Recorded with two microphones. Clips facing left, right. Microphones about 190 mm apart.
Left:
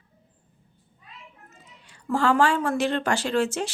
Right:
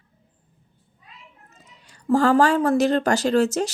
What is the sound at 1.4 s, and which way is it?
Speech, 40° right (ahead or behind).